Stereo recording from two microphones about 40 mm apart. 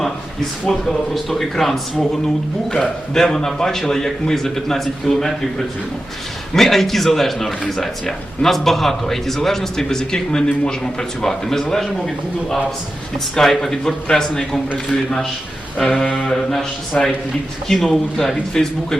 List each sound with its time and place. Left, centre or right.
0.7 s a man's voice: centre
1.1 s a man's voice: centre
2.0 s a man's voice: centre
6.5 s a man's voice: centre
15.8 s a man's voice: centre
16.9 s a man's voice: left
17.7 s a man's voice: centre